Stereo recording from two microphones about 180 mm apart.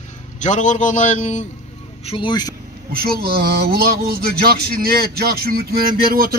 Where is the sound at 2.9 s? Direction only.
55° right (ahead or behind).